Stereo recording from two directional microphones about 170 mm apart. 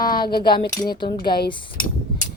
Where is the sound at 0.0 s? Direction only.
60° left (ahead or behind).